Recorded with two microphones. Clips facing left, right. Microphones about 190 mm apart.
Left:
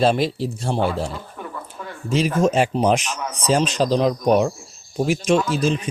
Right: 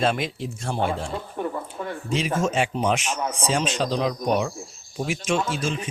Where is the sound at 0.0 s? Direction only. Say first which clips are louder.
Left 6 dB; 35° left (ahead or behind).